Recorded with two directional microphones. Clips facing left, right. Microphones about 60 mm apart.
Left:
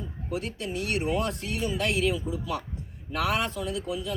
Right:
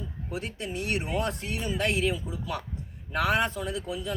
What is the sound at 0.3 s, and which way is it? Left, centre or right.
Speech, right.